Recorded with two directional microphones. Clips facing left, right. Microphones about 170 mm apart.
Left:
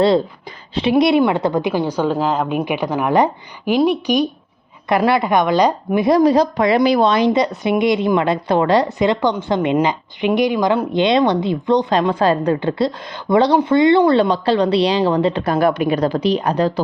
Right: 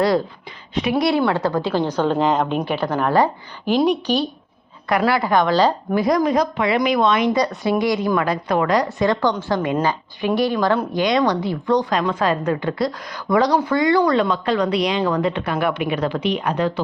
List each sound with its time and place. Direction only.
0.7 s a woman's voice: 30° left (ahead or behind); by 4.3 s 10° left (ahead or behind)
4.9 s a woman's voice: 25° left (ahead or behind)